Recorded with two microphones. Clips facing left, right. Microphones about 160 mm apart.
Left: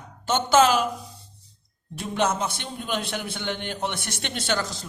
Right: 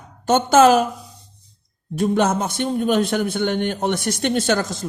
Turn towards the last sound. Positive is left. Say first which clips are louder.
# right 7 dB
turn(degrees=-50)  # may be behind; listen again after turning